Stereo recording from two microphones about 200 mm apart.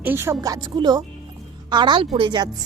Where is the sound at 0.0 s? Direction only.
10° right (ahead or behind).